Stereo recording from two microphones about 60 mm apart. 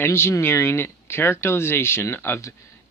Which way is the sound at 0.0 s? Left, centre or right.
Left.